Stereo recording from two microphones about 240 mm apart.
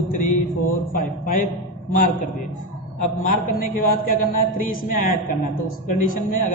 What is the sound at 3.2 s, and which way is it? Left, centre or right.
Speech, left.